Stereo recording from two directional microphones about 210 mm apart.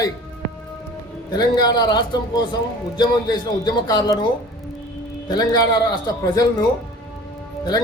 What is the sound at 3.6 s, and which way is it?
Speech, 20° left (ahead or behind).